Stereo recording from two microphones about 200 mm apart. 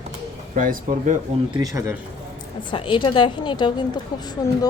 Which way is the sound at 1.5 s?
15° right (ahead or behind).